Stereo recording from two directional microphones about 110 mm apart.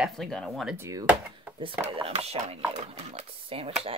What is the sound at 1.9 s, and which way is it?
Speech, 60° right (ahead or behind).